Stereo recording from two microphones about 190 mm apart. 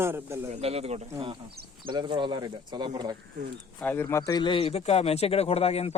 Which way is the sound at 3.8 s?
10° left (ahead or behind).